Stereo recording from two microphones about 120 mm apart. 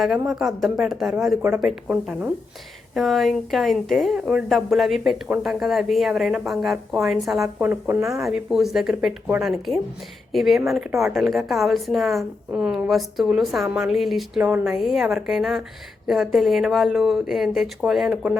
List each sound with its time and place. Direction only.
0.0 s speech: centre (ahead or behind)
1.4 s speech: 25° right (ahead or behind)
1.6 s speech: 10° right (ahead or behind)
7.4 s speech: 20° right (ahead or behind)
8.1 s speech: centre (ahead or behind)
14.4 s speech: 20° right (ahead or behind)
14.8 s speech: centre (ahead or behind)
18.1 s speech: 10° right (ahead or behind)